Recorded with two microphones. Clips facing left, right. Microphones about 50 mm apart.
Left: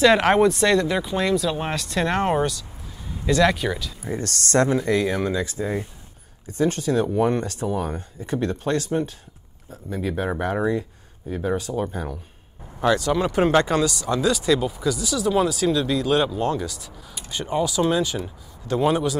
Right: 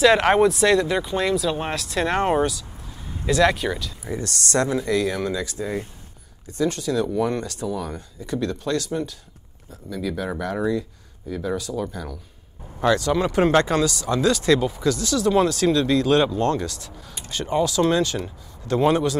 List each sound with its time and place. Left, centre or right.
0.0 s speech: centre
4.2 s speech: left
13.2 s speech: left
14.5 s speech: centre